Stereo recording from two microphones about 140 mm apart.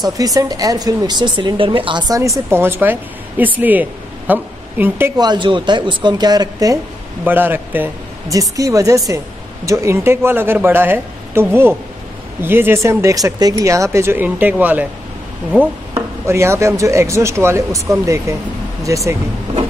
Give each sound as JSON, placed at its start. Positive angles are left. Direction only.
{"t": 0.0, "sound": "a woman's voice", "side_deg": -25}
{"t": 5.1, "sound": "speech", "side_deg": -30}
{"t": 7.2, "sound": "speech", "side_deg": -15}
{"t": 8.3, "sound": "speech", "side_deg": -25}
{"t": 15.9, "sound": "speech", "side_deg": -20}